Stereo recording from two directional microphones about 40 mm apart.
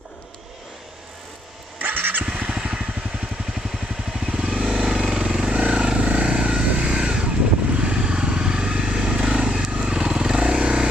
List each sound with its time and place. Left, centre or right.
1.8 s vehicle: right
2.2 s vehicle: right
3.5 s vehicle: centre
9.7 s vehicle: right